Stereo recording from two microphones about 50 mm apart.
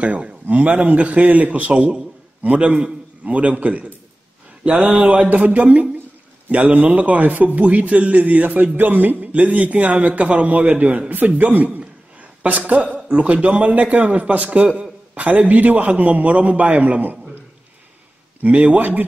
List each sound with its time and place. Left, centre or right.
0.0 s a man's voice: right
5.2 s a man's voice: right
18.4 s speech: right